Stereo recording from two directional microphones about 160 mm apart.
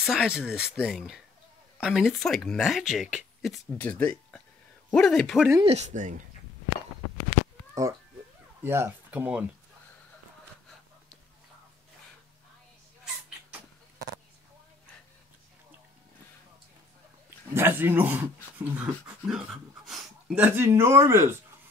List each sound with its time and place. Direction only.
0.0 s speech: 5° right (ahead or behind)
5.6 s speech: 40° right (ahead or behind)
7.8 s speech: 20° right (ahead or behind)
17.6 s speech: 15° right (ahead or behind)